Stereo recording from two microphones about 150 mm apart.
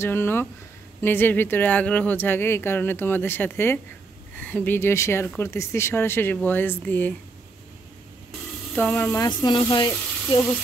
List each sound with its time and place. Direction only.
0.0 s speech: 15° left (ahead or behind)
8.7 s speech: 10° left (ahead or behind); by 10.5 s 25° left (ahead or behind)